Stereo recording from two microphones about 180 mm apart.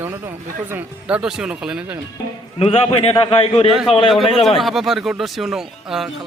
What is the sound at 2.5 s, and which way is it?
A man's voice, 35° left (ahead or behind).